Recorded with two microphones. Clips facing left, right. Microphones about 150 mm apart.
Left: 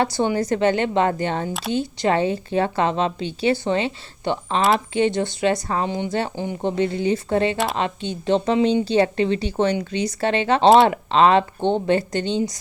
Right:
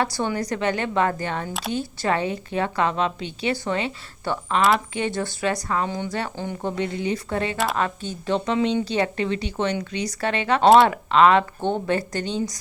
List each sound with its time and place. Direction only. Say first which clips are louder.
0.0 s a woman's voice: left 4 dB; 25° left (ahead or behind)
6.3 s speech: left 3 dB; 15° left (ahead or behind)
6.6 s a woman's voice: left 5 dB; 30° left (ahead or behind)